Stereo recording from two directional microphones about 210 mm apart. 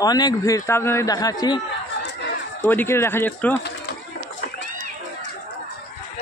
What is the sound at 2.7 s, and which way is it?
Speech, 10° left (ahead or behind).